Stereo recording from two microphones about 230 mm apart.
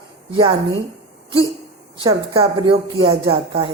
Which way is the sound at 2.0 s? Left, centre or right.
Right.